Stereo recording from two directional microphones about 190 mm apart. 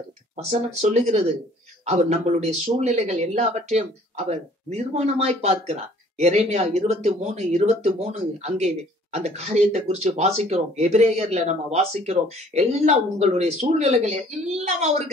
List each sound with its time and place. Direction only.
0.5 s speech: 35° right (ahead or behind)